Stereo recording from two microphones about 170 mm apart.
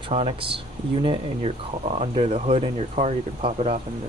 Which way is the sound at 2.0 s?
35° right (ahead or behind).